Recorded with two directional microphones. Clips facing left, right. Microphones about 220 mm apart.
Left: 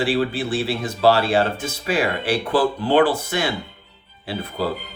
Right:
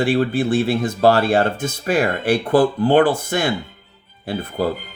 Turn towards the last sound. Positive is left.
turn(degrees=-50)  # may be behind; listen again after turning